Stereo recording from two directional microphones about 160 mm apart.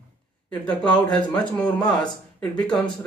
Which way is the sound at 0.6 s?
5° left (ahead or behind).